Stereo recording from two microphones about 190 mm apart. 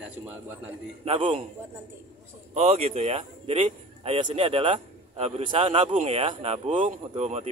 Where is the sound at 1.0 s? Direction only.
30° right (ahead or behind).